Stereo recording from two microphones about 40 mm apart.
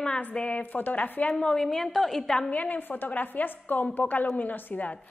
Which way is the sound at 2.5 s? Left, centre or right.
Left.